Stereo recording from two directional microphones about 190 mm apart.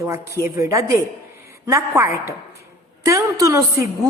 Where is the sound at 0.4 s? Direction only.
15° right (ahead or behind).